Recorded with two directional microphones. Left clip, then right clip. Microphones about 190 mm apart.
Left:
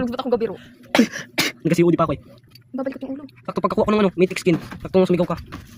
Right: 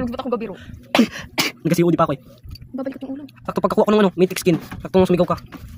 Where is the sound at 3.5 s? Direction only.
20° right (ahead or behind).